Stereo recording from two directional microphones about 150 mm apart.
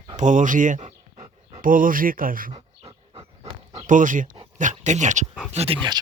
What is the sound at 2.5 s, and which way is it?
Dog, 35° right (ahead or behind).